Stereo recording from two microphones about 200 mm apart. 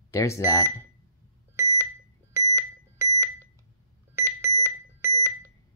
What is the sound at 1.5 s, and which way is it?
Alarm clock, 15° right (ahead or behind).